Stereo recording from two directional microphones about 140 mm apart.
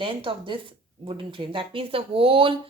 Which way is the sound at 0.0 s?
40° right (ahead or behind).